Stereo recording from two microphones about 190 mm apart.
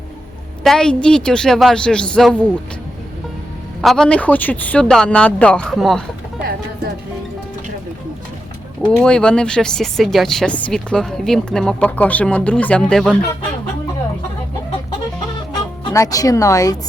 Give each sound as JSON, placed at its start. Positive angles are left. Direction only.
{"t": 0.6, "sound": "speech", "side_deg": 5}
{"t": 3.8, "sound": "speech", "side_deg": 0}
{"t": 9.0, "sound": "speech", "side_deg": 5}
{"t": 15.8, "sound": "speech", "side_deg": 20}